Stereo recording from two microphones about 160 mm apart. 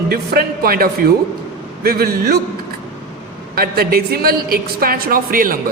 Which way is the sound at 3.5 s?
70° right (ahead or behind).